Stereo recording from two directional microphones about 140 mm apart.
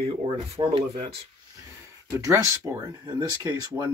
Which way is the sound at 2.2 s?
20° right (ahead or behind).